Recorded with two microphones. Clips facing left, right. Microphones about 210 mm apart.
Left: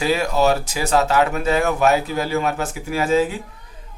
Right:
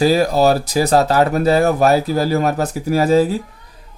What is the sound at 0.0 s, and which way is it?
Speech, 35° right (ahead or behind).